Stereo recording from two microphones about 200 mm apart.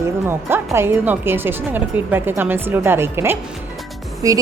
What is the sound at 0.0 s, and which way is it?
Speech, 10° right (ahead or behind).